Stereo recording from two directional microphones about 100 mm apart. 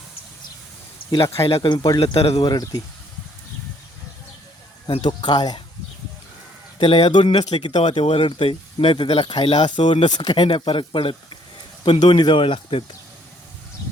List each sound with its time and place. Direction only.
1.4 s speech: 70° left (ahead or behind); by 2.0 s 45° left (ahead or behind)
2.0 s speech: 80° left
2.4 s speech: 40° left (ahead or behind)
5.0 s speech: 45° left (ahead or behind)
6.7 s speech: 65° left (ahead or behind)
8.0 s speech: 65° left (ahead or behind); by 10.3 s 45° left (ahead or behind)
10.3 s speech: 70° left (ahead or behind)